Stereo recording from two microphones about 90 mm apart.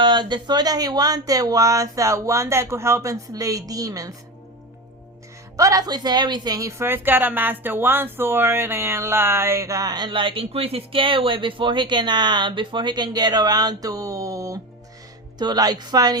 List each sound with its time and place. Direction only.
0.0 s speech: 60° right (ahead or behind); by 4.1 s 40° right (ahead or behind)
5.5 s a woman's voice: 40° right (ahead or behind)
15.4 s a woman's voice: 50° right (ahead or behind)